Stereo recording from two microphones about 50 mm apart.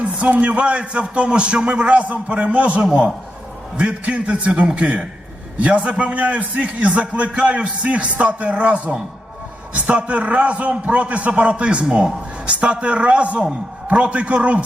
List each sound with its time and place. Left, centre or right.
0.0 s a man's voice: right
2.8 s a man's voice: centre